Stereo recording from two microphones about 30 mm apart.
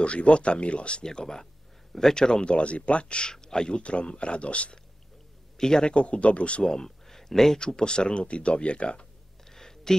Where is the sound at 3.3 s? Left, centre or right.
Left.